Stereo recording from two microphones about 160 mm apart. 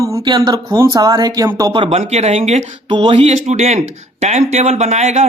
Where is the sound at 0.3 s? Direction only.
25° right (ahead or behind).